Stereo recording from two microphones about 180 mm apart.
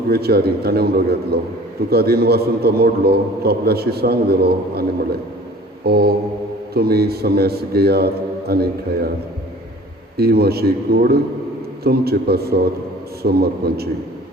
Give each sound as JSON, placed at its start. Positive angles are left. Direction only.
{"t": 0.1, "sound": "a man's voice", "side_deg": -60}
{"t": 10.2, "sound": "a man's voice", "side_deg": -60}